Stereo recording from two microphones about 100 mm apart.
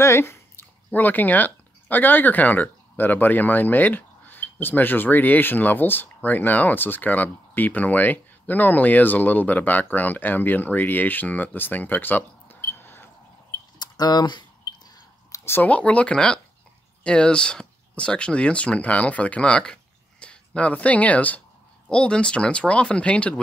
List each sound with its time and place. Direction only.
0.0 s speech: 25° left (ahead or behind)
13.7 s a sound: 45° left (ahead or behind)
15.3 s speech: 25° left (ahead or behind)